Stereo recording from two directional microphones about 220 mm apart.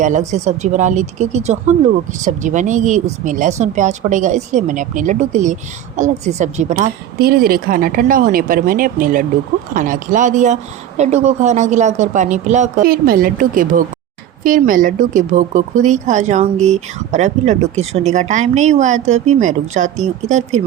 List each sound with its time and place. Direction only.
0.0 s speech: 35° right (ahead or behind)